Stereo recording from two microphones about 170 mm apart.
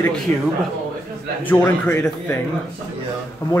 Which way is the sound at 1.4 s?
10° left (ahead or behind).